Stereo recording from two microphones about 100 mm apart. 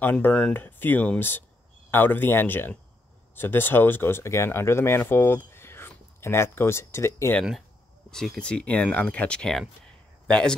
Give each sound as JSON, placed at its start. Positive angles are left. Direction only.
{"t": 0.0, "sound": "speech", "side_deg": 15}
{"t": 8.1, "sound": "speech", "side_deg": 10}